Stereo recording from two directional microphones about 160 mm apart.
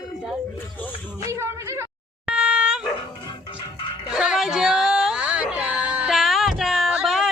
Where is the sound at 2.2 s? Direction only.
5° right (ahead or behind).